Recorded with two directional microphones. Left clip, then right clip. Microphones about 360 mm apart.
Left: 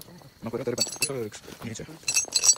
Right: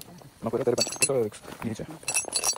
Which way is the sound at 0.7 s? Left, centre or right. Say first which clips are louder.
Right 2 dB; right.